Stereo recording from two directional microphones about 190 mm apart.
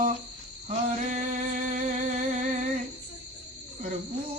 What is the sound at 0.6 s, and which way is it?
Singing, 40° right (ahead or behind).